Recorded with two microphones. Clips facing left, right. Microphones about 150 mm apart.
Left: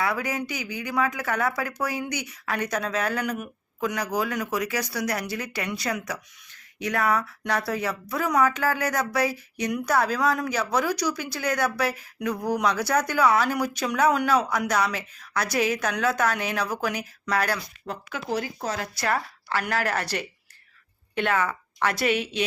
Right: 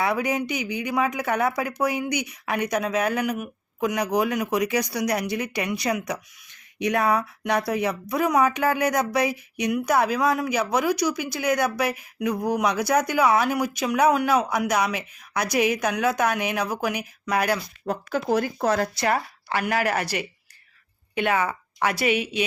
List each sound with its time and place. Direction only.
0.0 s speech: 20° right (ahead or behind)
17.8 s speech: 45° right (ahead or behind)
18.9 s speech: 15° right (ahead or behind)